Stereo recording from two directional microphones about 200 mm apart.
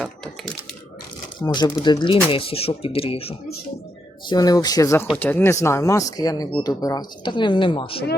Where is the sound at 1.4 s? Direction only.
20° left (ahead or behind).